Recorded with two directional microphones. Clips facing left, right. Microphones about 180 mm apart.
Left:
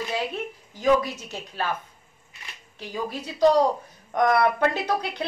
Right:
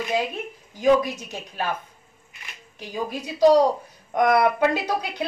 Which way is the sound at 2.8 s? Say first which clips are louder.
Right 2 dB; 15° right (ahead or behind).